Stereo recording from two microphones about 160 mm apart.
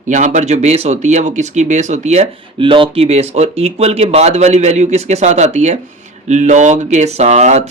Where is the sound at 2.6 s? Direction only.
30° right (ahead or behind).